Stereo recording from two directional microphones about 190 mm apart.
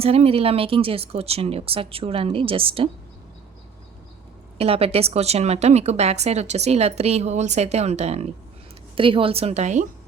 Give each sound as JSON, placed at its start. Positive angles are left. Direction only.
{"t": 0.0, "sound": "speech", "side_deg": -30}
{"t": 4.5, "sound": "speech", "side_deg": -30}